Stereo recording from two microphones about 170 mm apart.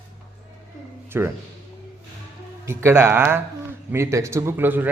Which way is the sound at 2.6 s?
15° right (ahead or behind).